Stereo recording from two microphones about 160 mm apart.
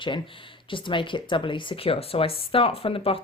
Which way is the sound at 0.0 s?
30° left (ahead or behind).